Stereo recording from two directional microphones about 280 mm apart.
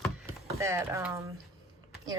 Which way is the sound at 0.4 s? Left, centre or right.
Centre.